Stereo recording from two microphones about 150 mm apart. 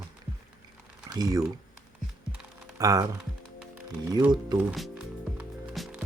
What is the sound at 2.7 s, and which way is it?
Speech, 25° right (ahead or behind).